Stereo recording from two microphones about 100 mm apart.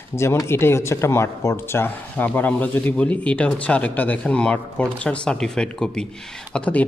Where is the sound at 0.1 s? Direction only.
25° left (ahead or behind).